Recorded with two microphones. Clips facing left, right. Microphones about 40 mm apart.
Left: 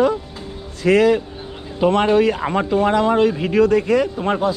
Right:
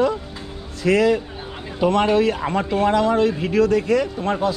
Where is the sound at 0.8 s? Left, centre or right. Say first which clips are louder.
Left 3 dB; left.